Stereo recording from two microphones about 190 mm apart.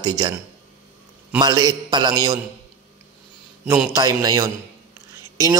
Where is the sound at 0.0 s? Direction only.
25° right (ahead or behind).